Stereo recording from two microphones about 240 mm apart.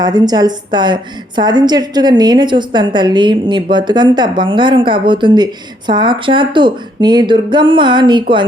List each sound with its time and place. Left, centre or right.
0.0 s a woman's voice: centre